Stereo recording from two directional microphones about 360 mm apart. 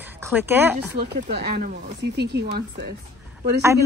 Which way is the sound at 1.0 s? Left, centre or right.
Right.